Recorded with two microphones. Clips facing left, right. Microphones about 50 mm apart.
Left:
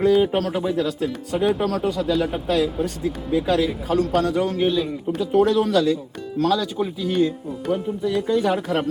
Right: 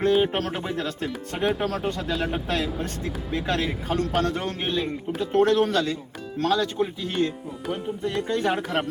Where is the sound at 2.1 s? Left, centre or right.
Centre.